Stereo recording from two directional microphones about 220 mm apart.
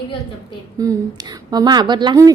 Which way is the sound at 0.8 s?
15° right (ahead or behind).